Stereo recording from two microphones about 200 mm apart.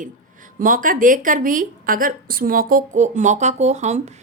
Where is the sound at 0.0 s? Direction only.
40° right (ahead or behind).